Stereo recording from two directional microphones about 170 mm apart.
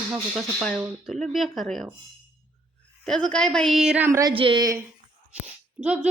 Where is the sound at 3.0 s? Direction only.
5° left (ahead or behind).